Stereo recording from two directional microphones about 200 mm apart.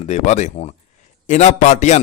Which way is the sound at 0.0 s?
35° left (ahead or behind).